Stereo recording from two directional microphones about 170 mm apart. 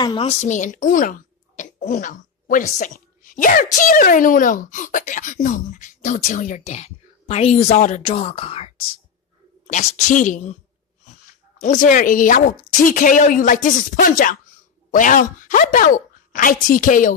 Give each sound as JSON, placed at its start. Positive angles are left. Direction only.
{"t": 0.2, "sound": "speech", "side_deg": 40}
{"t": 9.7, "sound": "speech", "side_deg": 45}
{"t": 11.6, "sound": "speech", "side_deg": 45}